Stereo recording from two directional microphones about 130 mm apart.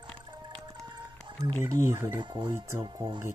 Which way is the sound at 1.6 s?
20° right (ahead or behind).